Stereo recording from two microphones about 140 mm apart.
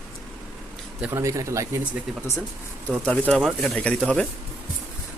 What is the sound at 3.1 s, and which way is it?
Speech, 10° left (ahead or behind).